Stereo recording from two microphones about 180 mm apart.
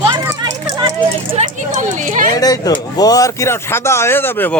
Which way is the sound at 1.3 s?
45° right (ahead or behind).